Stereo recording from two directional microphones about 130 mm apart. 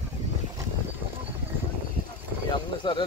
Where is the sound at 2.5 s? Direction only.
40° left (ahead or behind).